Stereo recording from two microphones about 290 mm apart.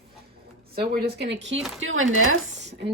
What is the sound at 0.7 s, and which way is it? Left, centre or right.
A woman's voice, right.